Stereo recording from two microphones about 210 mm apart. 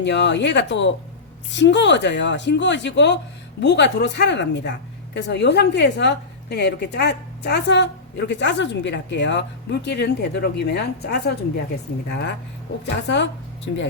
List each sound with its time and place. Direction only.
0.0 s a woman's voice: 55° left (ahead or behind)
12.8 s speech: 55° left (ahead or behind)